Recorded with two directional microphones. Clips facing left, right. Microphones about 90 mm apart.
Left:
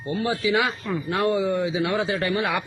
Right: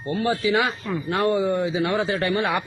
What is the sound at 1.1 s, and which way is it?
A man's voice, 45° right (ahead or behind).